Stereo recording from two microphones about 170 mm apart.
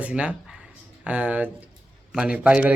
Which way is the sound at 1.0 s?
10° right (ahead or behind).